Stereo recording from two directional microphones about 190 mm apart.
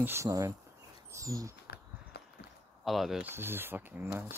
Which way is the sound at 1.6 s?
60° left (ahead or behind).